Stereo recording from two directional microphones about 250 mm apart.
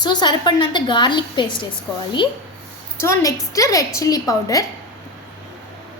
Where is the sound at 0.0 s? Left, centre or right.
Centre.